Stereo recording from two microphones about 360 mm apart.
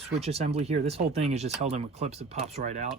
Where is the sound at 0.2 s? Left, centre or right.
Centre.